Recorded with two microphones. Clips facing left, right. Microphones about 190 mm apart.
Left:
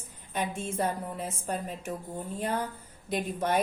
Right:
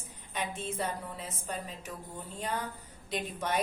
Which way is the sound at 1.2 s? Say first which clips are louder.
Left 5 dB; 50° left (ahead or behind).